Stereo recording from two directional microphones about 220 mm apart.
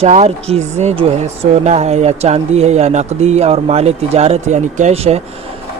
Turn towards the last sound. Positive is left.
turn(degrees=-30)  # may be behind; listen again after turning